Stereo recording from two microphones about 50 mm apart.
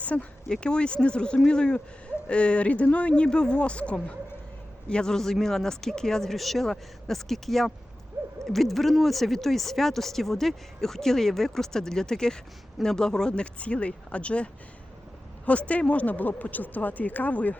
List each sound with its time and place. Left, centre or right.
0.0 s speech: left
0.4 s speech: centre; by 17.6 s left